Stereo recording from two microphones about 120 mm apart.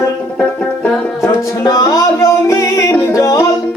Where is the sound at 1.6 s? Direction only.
30° left (ahead or behind).